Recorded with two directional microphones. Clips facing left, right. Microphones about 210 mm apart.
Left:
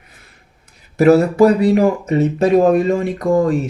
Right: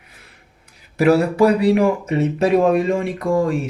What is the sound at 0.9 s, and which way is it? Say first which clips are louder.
Speech: left 4 dB; 45° left (ahead or behind).